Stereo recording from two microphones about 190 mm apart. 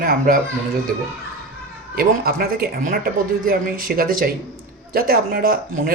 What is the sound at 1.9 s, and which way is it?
Speech, 50° right (ahead or behind).